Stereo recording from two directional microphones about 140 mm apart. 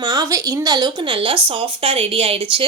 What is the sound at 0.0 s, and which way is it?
A woman's voice, 30° right (ahead or behind).